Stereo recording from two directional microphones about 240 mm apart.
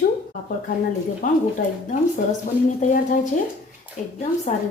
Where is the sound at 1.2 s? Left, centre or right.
Left.